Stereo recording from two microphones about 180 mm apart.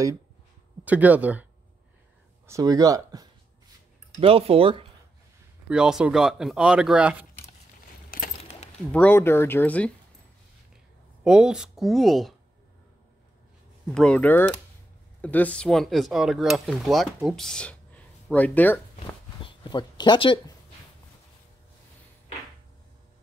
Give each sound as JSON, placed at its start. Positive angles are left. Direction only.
{"t": 0.8, "sound": "speech", "side_deg": -10}
{"t": 2.4, "sound": "speech", "side_deg": -20}
{"t": 4.2, "sound": "speech", "side_deg": -30}
{"t": 5.7, "sound": "speech", "side_deg": -5}
{"t": 8.4, "sound": "a sound", "side_deg": 35}
{"t": 8.9, "sound": "speech", "side_deg": 10}
{"t": 11.2, "sound": "speech", "side_deg": -5}
{"t": 13.8, "sound": "speech", "side_deg": 5}
{"t": 18.9, "sound": "speech", "side_deg": 30}